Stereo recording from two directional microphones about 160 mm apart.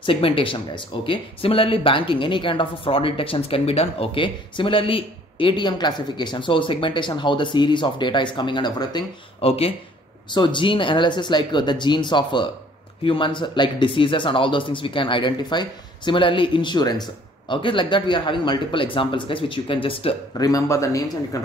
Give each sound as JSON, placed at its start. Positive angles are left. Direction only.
{"t": 0.0, "sound": "speech", "side_deg": 35}
{"t": 20.3, "sound": "speech", "side_deg": 20}